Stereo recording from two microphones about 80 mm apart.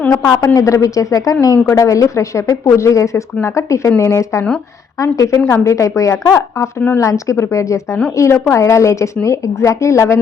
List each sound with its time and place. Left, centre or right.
0.3 s a woman's voice: left